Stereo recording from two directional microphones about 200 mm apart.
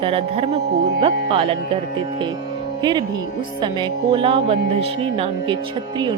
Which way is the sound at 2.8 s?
20° right (ahead or behind).